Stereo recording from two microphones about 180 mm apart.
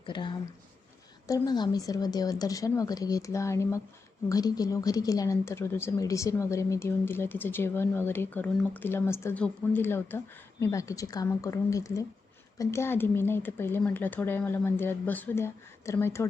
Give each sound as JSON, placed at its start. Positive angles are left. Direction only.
{"t": 0.0, "sound": "speech", "side_deg": 25}